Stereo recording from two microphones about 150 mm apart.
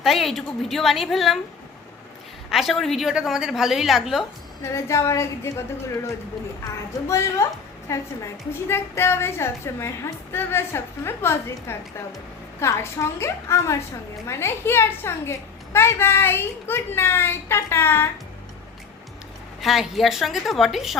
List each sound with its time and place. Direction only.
0.0 s a woman's voice: centre (ahead or behind)
2.5 s a woman's voice: centre (ahead or behind)
4.6 s a woman's voice: 20° left (ahead or behind)
7.1 s a woman's voice: 20° left (ahead or behind)
19.6 s a woman's voice: centre (ahead or behind)